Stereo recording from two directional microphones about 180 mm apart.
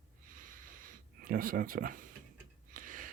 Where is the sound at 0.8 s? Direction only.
50° right (ahead or behind).